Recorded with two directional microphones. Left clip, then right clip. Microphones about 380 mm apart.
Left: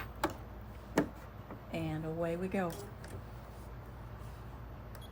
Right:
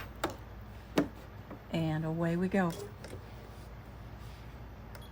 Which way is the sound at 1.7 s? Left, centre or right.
Right.